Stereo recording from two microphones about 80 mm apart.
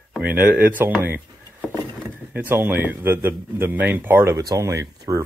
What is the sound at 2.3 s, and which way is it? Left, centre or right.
Speech, right.